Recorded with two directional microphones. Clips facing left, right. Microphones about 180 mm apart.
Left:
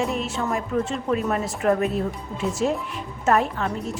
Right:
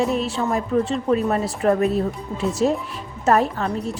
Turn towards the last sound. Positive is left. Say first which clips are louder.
# right 2 dB
turn(degrees=-35)  # may be behind; listen again after turning